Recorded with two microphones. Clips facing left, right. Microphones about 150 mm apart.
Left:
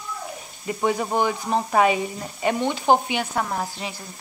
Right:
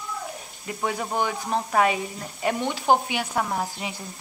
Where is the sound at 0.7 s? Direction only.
Centre (ahead or behind).